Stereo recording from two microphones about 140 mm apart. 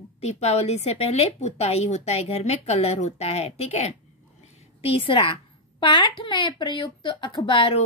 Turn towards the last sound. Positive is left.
turn(degrees=35)  # may be behind; listen again after turning